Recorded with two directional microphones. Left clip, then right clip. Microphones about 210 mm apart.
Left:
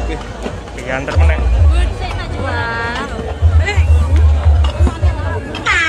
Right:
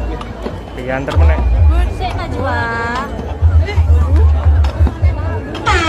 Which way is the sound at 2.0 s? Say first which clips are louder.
Right 6 dB; 50° right (ahead or behind).